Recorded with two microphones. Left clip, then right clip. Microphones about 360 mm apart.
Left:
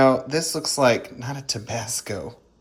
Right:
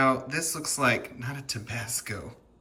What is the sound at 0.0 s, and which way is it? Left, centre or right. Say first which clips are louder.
Speech: left 7 dB; centre.